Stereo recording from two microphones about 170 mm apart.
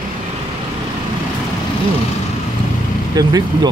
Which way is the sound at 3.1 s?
25° right (ahead or behind).